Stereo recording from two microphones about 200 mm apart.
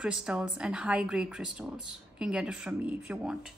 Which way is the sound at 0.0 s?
5° right (ahead or behind).